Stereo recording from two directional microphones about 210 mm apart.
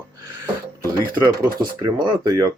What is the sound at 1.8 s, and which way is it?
Speech, 15° right (ahead or behind).